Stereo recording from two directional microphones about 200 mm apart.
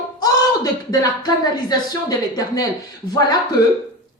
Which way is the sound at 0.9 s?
20° left (ahead or behind).